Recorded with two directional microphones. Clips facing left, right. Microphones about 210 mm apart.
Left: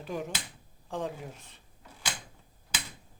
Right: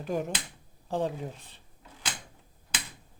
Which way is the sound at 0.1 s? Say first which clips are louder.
Right 4 dB; 45° right (ahead or behind).